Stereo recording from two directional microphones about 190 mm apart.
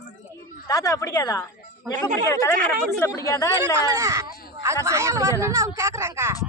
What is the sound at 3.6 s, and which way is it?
Speech, 15° right (ahead or behind).